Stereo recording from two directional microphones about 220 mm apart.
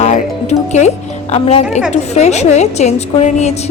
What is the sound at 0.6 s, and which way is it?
A woman's voice, 30° left (ahead or behind).